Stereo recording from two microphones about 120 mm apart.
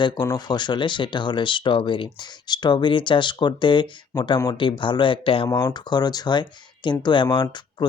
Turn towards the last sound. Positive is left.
turn(degrees=40)  # may be behind; listen again after turning